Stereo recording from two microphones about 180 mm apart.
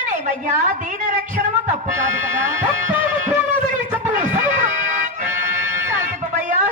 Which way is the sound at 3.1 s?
45° right (ahead or behind).